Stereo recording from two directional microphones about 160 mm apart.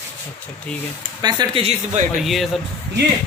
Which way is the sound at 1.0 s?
25° right (ahead or behind).